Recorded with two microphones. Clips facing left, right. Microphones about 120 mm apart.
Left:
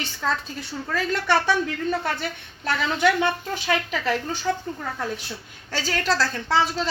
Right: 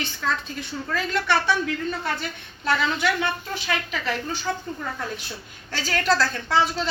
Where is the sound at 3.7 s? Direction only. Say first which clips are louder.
Left 4 dB; 40° left (ahead or behind).